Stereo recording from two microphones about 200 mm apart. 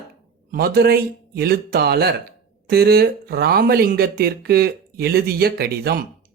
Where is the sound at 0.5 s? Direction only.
50° right (ahead or behind).